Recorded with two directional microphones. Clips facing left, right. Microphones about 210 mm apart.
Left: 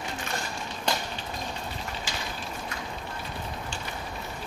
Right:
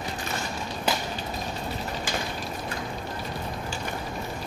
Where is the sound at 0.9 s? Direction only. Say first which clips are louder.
Right 2 dB; 5° right (ahead or behind).